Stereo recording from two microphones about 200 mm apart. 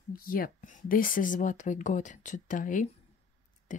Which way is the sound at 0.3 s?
45° left (ahead or behind).